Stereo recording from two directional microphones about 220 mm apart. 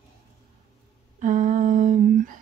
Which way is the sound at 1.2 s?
35° right (ahead or behind).